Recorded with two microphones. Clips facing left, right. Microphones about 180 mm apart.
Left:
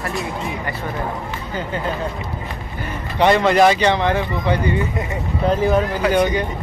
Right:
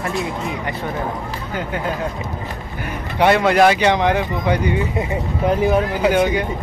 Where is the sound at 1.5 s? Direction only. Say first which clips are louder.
Even; 10° right (ahead or behind).